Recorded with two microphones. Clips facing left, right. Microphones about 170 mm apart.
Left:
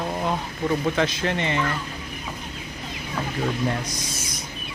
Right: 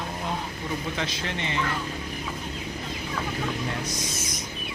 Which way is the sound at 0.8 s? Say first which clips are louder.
Left 8 dB; 60° left (ahead or behind).